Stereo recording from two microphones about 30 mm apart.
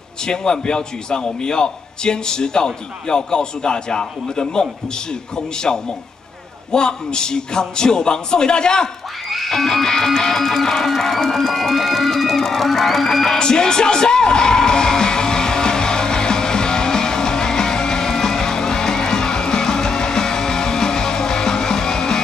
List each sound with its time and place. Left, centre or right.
0.3 s a man's voice: left
9.3 s music: centre
9.7 s a man's voice: centre
13.4 s music: left